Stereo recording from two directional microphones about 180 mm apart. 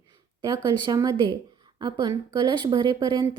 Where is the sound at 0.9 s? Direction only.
20° right (ahead or behind).